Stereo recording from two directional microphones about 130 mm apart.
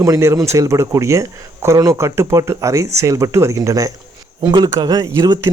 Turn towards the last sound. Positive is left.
turn(degrees=-35)  # may be behind; listen again after turning